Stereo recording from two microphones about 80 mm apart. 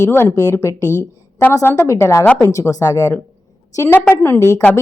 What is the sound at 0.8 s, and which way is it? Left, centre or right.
Speech, right.